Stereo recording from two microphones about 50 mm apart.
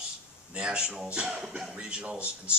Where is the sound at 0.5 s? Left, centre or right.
Right.